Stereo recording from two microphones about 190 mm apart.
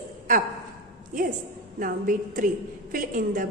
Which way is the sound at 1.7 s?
45° right (ahead or behind).